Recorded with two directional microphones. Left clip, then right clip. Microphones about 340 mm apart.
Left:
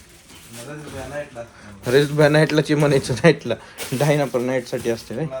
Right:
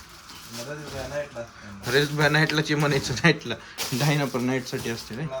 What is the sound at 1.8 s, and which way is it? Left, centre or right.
A man's voice, centre.